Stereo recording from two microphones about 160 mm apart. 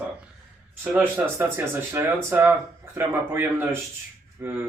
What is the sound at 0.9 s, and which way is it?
Speech, 10° right (ahead or behind).